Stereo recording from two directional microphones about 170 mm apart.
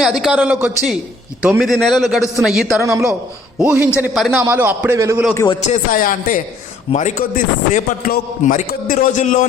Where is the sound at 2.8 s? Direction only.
15° right (ahead or behind); by 4.4 s centre (ahead or behind).